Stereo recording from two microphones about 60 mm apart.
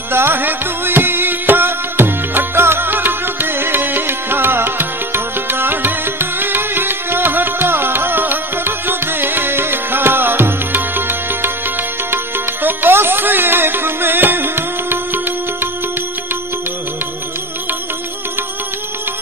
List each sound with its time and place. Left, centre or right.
0.1 s music: right
12.6 s music: right